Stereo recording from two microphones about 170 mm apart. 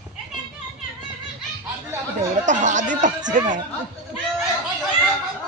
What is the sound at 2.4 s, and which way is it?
Speech, 45° right (ahead or behind).